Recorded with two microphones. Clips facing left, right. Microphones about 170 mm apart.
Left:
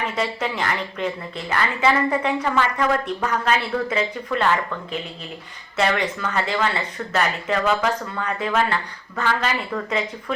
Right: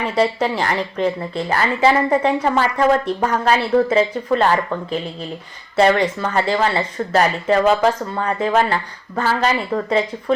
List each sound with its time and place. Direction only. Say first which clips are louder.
0.2 s a woman's voice: right 9 dB; 35° right (ahead or behind)